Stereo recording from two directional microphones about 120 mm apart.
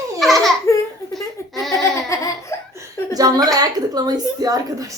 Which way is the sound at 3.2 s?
30° right (ahead or behind).